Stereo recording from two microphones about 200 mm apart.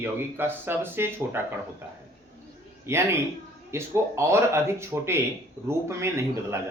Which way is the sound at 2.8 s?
15° right (ahead or behind).